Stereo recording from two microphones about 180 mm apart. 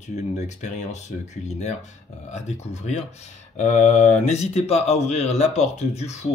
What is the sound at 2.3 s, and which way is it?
Speech, 40° left (ahead or behind).